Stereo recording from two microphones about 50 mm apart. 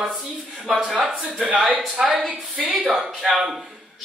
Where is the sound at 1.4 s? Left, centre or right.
Right.